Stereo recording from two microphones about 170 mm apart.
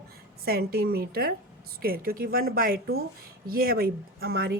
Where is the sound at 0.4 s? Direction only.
65° right (ahead or behind).